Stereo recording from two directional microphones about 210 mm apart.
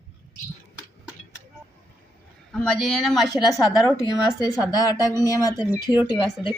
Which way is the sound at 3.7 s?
20° left (ahead or behind).